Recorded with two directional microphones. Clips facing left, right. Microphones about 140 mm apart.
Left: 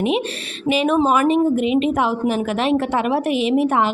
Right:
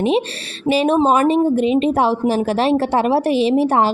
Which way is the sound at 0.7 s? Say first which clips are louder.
Right 2 dB; 35° right (ahead or behind).